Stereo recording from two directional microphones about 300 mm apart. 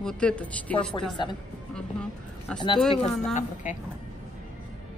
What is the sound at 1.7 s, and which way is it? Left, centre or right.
Speech, centre.